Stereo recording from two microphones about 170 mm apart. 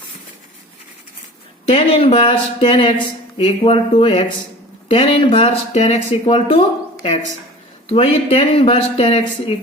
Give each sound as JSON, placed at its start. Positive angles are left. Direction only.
{"t": 1.6, "sound": "speech", "side_deg": 35}